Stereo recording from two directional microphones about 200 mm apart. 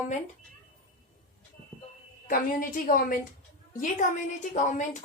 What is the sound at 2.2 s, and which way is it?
Speech, 45° left (ahead or behind).